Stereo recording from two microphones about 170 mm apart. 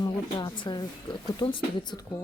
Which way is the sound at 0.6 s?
25° left (ahead or behind).